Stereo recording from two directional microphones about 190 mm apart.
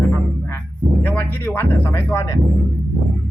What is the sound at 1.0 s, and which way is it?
Speech, 10° left (ahead or behind).